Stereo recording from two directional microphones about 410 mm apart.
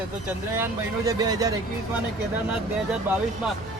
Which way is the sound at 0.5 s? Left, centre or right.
Centre.